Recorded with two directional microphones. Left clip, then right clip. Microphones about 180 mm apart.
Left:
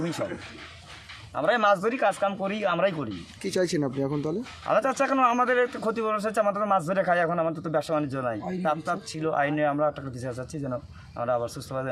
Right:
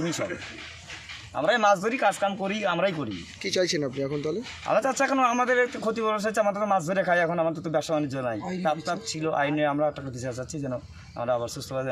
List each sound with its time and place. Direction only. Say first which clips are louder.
0.0 s a man's voice: right 1 dB; 5° left (ahead or behind)
1.4 s a man's voice: even; 5° left (ahead or behind)
3.4 s speech: right 1 dB; 65° left (ahead or behind)
3.8 s speech: left 1 dB; 40° left (ahead or behind)
4.6 s a man's voice: even; 5° left (ahead or behind)
8.4 s a man's voice: even; 45° left (ahead or behind)
8.6 s a man's voice: even; 5° left (ahead or behind)